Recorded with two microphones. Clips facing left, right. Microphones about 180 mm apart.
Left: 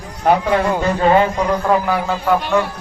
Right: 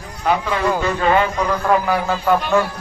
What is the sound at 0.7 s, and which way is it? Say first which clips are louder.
Speech: left 1 dB; 30° left (ahead or behind).